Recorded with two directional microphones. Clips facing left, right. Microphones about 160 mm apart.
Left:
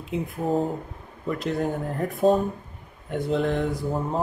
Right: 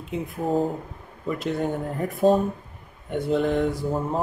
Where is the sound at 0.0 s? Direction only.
Centre (ahead or behind).